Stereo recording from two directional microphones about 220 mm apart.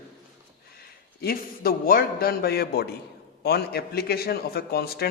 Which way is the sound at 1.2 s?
40° left (ahead or behind).